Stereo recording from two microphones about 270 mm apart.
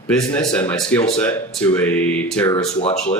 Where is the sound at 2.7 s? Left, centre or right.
Left.